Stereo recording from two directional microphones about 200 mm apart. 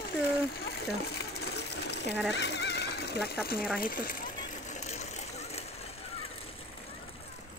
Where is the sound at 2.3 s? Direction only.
60° left (ahead or behind).